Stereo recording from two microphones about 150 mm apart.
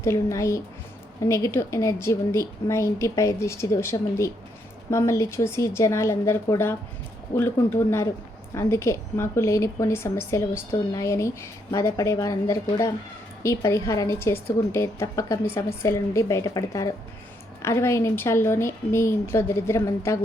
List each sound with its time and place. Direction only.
0.0 s a woman's voice: 20° left (ahead or behind)